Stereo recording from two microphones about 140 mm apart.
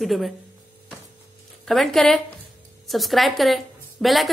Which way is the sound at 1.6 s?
Centre (ahead or behind).